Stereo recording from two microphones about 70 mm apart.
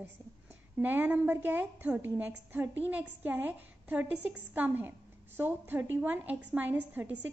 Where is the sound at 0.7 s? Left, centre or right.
Right.